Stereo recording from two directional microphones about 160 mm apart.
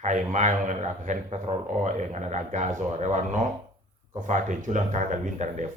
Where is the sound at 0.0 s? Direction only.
50° right (ahead or behind).